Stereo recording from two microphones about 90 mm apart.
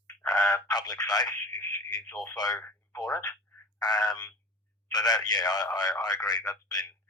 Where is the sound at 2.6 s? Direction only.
25° left (ahead or behind).